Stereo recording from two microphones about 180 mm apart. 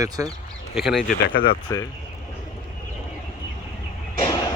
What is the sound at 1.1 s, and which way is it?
Speech, 55° left (ahead or behind).